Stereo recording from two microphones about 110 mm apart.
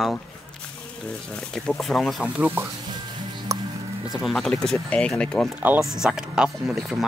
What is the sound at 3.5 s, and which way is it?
Music, 30° right (ahead or behind).